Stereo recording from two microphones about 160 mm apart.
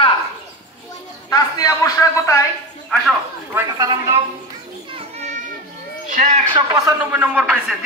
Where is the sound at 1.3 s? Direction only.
25° left (ahead or behind).